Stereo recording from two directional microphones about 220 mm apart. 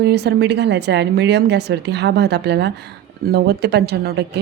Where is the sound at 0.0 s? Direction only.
50° right (ahead or behind).